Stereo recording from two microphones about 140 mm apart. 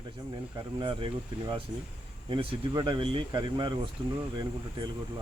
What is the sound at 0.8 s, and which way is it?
Speech, 35° right (ahead or behind).